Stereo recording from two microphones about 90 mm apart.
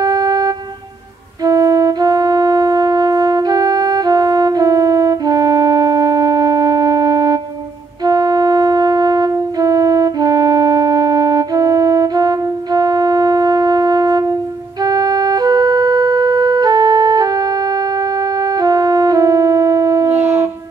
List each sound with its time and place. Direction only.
0.0 s a sound: 45° right (ahead or behind)
1.4 s music: 40° right (ahead or behind)
14.8 s organ: 45° right (ahead or behind)
18.4 s music: 45° right (ahead or behind)
20.1 s shofar: 20° right (ahead or behind)